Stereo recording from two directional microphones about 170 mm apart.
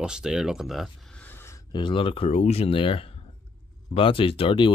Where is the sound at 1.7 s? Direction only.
30° left (ahead or behind).